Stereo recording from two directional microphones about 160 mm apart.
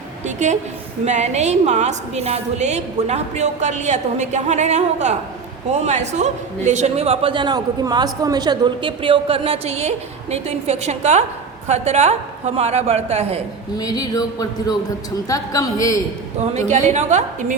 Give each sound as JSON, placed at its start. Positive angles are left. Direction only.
{"t": 0.3, "sound": "a sound", "side_deg": -45}
{"t": 1.0, "sound": "a woman's voice", "side_deg": -45}
{"t": 13.7, "sound": "speech", "side_deg": 25}
{"t": 16.6, "sound": "a woman's voice", "side_deg": -45}